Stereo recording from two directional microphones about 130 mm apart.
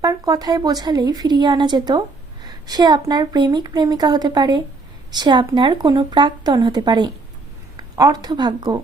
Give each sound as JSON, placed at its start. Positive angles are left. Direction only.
{"t": 0.0, "sound": "a woman's voice", "side_deg": -30}